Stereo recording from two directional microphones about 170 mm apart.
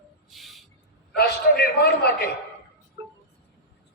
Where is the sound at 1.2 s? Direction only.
70° left (ahead or behind).